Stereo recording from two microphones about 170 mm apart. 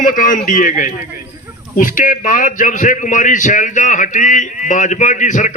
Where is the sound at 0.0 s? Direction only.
50° left (ahead or behind).